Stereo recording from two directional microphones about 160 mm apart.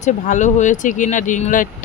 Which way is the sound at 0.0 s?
50° left (ahead or behind).